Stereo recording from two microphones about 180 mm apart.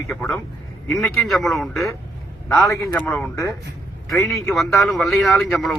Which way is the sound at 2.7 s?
15° left (ahead or behind).